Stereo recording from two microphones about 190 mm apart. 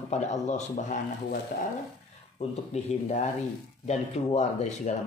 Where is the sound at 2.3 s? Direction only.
35° left (ahead or behind).